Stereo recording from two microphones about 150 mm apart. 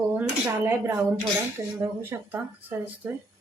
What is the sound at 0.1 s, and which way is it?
Speech, 15° right (ahead or behind).